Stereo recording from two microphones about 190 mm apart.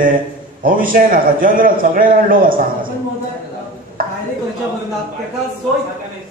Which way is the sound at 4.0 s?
50° right (ahead or behind).